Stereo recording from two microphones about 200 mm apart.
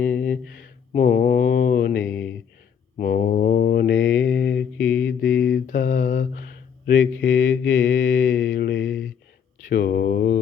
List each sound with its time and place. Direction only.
0.0 s a sound: 10° left (ahead or behind)
0.9 s mantra: 40° left (ahead or behind)
3.0 s mantra: 40° left (ahead or behind)
3.9 s mantra: 70° left (ahead or behind)
5.6 s a sound: 45° left (ahead or behind)
7.2 s mantra: 70° left (ahead or behind)
9.6 s mantra: 50° left (ahead or behind)